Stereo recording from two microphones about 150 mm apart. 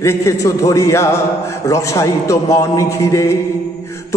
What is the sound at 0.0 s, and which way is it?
Mantra, 20° left (ahead or behind).